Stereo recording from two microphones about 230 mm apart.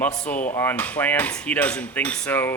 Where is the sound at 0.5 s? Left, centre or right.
Centre.